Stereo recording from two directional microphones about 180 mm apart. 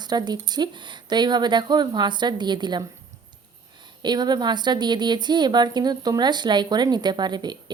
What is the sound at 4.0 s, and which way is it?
A woman's voice, 25° right (ahead or behind).